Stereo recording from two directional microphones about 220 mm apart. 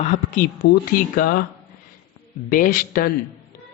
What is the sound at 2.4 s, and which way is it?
Speech, 40° left (ahead or behind).